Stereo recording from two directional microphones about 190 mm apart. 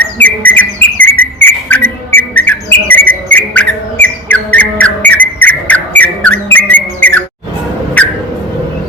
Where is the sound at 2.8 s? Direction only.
10° left (ahead or behind).